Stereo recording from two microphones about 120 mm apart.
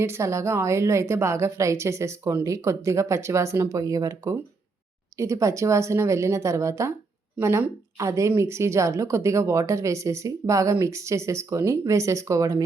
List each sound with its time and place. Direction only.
0.0 s a woman's voice: 25° right (ahead or behind)